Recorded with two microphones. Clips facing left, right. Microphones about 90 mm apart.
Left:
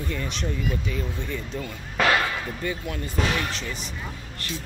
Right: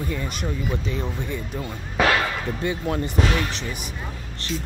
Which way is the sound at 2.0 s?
5° right (ahead or behind).